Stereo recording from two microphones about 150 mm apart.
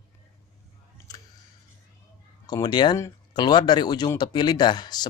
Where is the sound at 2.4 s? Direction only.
30° left (ahead or behind).